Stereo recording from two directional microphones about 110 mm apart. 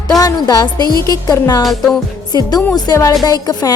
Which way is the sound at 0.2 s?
35° left (ahead or behind).